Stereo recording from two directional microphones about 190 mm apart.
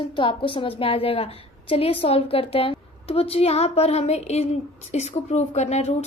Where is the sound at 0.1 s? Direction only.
25° left (ahead or behind).